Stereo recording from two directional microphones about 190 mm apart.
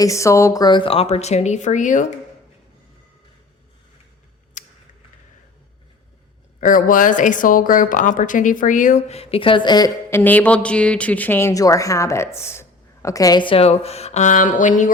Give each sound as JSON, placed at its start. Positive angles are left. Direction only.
{"t": 0.0, "sound": "speech", "side_deg": 15}
{"t": 4.6, "sound": "a sound", "side_deg": 45}
{"t": 6.6, "sound": "speech", "side_deg": 45}